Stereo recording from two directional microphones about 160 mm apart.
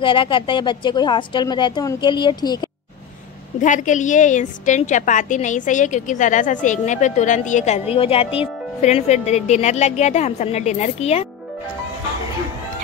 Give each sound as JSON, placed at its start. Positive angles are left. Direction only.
{"t": 0.0, "sound": "a woman's voice", "side_deg": 30}
{"t": 3.6, "sound": "a woman's voice", "side_deg": 50}